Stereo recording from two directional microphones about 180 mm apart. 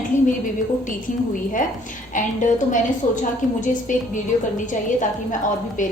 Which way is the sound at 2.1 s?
45° left (ahead or behind).